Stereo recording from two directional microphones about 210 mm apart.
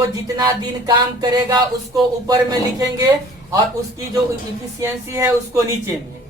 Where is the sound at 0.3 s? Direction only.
20° right (ahead or behind).